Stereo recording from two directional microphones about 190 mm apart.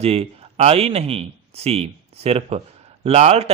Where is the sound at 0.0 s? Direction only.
35° right (ahead or behind).